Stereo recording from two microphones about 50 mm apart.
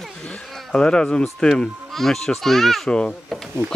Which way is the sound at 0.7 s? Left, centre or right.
Centre.